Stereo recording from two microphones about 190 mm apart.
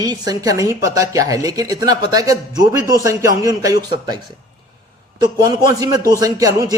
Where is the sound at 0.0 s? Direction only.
20° right (ahead or behind).